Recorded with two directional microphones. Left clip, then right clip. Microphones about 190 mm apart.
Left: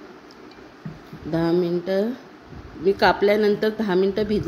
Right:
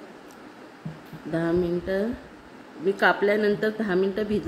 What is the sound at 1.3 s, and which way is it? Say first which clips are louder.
A woman's voice: left 3 dB; 30° left (ahead or behind).